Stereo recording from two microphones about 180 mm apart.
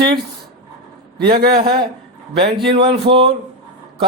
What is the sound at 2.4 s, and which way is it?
Speech, 30° right (ahead or behind).